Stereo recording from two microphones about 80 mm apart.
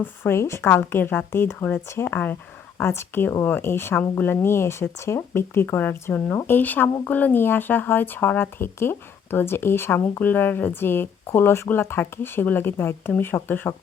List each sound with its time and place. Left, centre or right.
0.0 s speech: left
2.7 s speech: left